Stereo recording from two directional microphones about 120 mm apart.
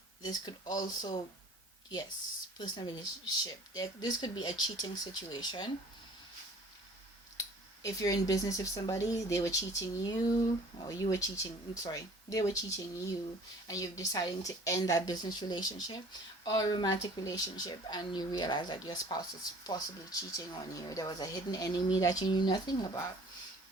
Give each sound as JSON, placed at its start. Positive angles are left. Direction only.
{"t": 0.3, "sound": "speech", "side_deg": 35}
{"t": 2.6, "sound": "speech", "side_deg": 40}
{"t": 7.3, "sound": "speech", "side_deg": 30}